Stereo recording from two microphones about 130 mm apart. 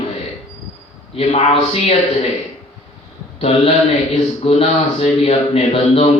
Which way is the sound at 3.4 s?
50° left (ahead or behind).